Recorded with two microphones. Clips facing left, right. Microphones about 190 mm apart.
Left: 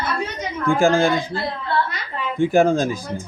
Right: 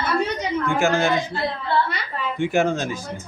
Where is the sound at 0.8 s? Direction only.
30° left (ahead or behind).